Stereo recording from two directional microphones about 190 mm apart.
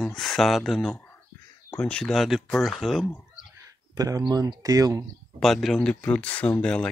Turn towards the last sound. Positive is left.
turn(degrees=5)  # may be behind; listen again after turning